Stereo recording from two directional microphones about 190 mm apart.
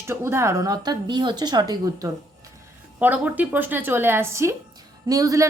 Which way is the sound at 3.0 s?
10° right (ahead or behind).